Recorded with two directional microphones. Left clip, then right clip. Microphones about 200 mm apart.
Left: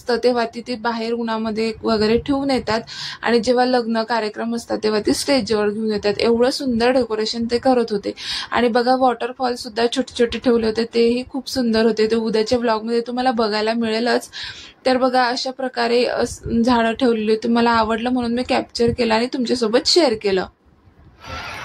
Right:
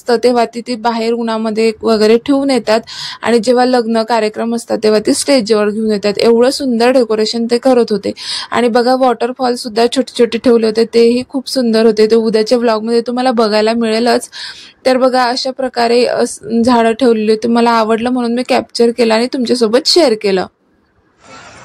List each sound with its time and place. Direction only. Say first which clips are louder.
0.0 s speech: right 7 dB; 35° right (ahead or behind)